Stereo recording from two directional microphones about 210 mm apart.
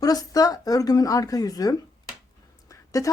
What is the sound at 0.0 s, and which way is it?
Speech, 15° left (ahead or behind).